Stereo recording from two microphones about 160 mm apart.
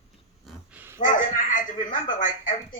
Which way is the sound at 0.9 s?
55° left (ahead or behind).